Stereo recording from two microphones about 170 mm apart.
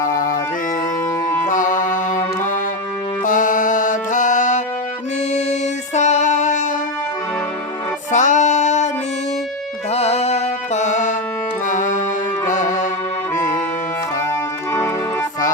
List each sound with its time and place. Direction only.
0.0 s music: 55° left (ahead or behind)
1.5 s music: 50° left (ahead or behind)
8.1 s music: 45° left (ahead or behind)
9.9 s music: 40° left (ahead or behind)